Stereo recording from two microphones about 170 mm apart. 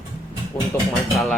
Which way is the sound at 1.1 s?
Centre (ahead or behind).